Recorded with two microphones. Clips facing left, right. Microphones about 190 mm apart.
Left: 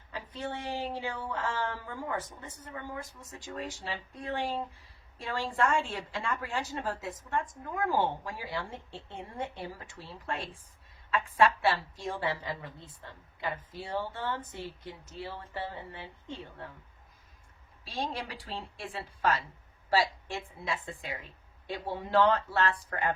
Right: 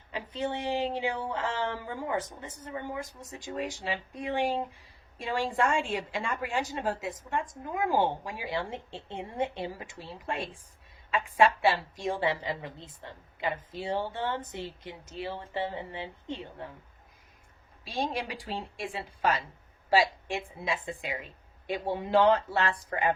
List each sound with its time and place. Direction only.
0.1 s a woman's voice: 20° right (ahead or behind)
17.8 s a woman's voice: 15° right (ahead or behind)